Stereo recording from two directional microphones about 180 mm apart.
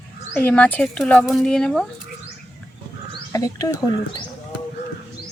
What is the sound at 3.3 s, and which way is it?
Speech, 20° left (ahead or behind).